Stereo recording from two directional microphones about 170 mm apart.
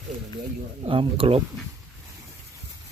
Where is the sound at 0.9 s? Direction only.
30° right (ahead or behind).